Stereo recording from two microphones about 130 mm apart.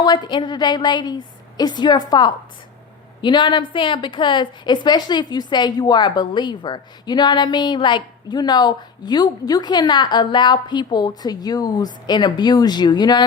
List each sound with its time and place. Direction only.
0.0 s a woman's voice: 35° left (ahead or behind)